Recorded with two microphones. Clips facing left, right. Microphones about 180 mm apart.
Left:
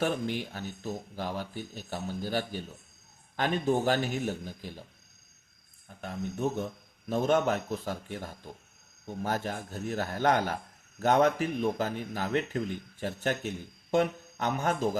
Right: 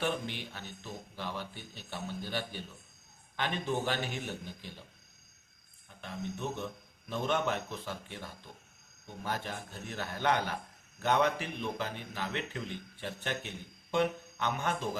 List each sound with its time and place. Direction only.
0.0 s a man's voice: 45° left (ahead or behind)
6.0 s a man's voice: 45° left (ahead or behind)